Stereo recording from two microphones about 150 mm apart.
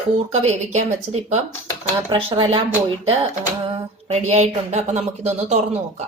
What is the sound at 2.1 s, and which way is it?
Speech, 35° right (ahead or behind).